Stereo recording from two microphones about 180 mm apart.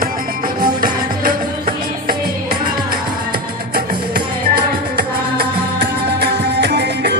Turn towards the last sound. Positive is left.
turn(degrees=-65)  # may be behind; listen again after turning